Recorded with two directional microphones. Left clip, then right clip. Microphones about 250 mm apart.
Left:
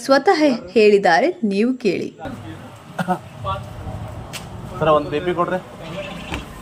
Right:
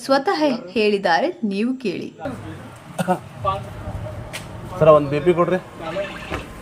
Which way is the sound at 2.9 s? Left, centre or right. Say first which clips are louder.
Right 1 dB; right.